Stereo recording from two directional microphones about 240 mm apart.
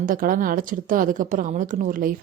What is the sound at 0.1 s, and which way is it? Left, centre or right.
Speech, right.